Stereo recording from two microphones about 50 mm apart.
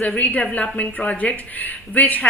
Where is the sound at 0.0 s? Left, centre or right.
Left.